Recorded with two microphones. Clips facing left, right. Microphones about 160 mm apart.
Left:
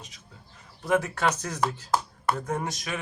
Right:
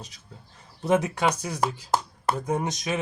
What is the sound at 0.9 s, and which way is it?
Speech, 20° right (ahead or behind).